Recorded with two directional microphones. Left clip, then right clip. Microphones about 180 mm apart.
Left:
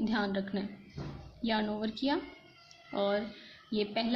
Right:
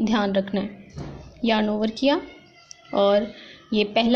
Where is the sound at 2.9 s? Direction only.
30° right (ahead or behind).